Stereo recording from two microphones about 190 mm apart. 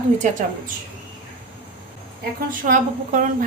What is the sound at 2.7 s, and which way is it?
Speech, 45° right (ahead or behind).